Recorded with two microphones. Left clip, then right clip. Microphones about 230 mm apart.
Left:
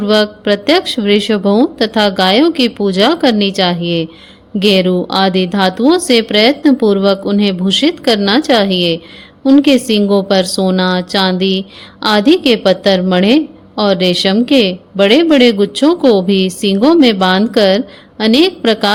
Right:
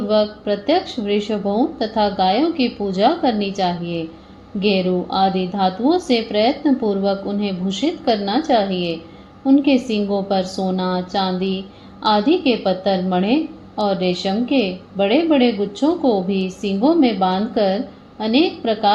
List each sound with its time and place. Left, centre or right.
0.1 s a woman's voice: left